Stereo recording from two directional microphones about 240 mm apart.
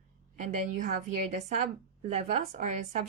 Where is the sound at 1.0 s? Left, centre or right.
Right.